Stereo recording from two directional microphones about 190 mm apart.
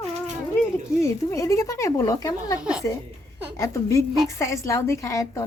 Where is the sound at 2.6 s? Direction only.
5° right (ahead or behind).